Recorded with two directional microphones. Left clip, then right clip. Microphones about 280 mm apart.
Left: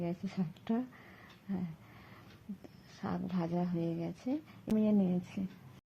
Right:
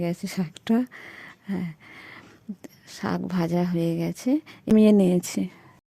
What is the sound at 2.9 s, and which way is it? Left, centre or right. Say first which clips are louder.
Speech: right 11 dB; right.